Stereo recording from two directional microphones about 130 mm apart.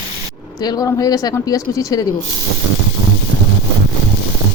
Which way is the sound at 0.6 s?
30° left (ahead or behind).